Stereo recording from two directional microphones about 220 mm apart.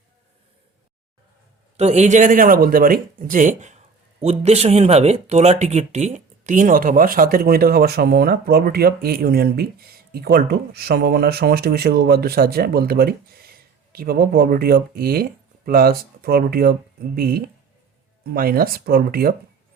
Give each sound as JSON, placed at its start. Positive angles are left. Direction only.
{"t": 1.7, "sound": "speech", "side_deg": -30}